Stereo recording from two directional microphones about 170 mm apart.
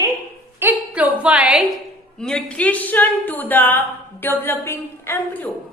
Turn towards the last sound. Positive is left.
turn(degrees=10)  # may be behind; listen again after turning